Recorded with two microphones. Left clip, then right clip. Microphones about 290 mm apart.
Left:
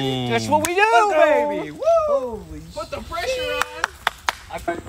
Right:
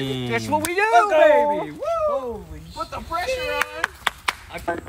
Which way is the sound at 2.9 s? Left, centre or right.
Centre.